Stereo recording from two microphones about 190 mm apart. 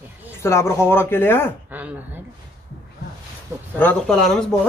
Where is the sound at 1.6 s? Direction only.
10° right (ahead or behind).